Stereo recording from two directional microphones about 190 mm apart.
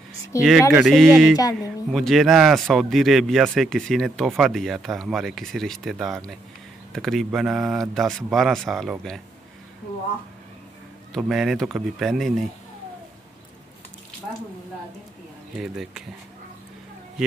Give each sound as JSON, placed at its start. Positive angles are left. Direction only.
{"t": 0.4, "sound": "speech", "side_deg": -5}
{"t": 1.3, "sound": "music", "side_deg": 20}
{"t": 1.6, "sound": "speech", "side_deg": 0}
{"t": 11.1, "sound": "speech", "side_deg": 0}
{"t": 15.5, "sound": "speech", "side_deg": 0}